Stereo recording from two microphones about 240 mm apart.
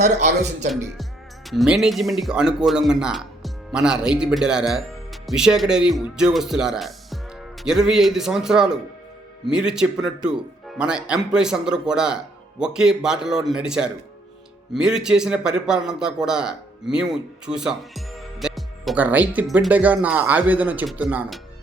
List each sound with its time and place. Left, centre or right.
0.2 s a man's voice: right
1.5 s a man's voice: centre